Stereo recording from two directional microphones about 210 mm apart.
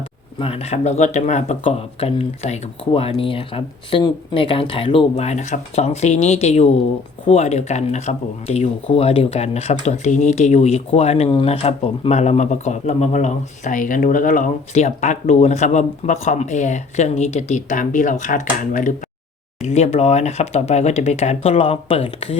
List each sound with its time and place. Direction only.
0.3 s speech: 25° left (ahead or behind)